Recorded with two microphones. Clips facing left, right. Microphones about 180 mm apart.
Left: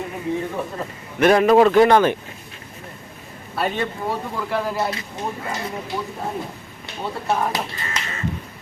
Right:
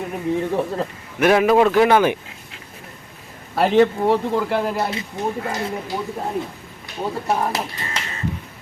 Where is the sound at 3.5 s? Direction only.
90° right.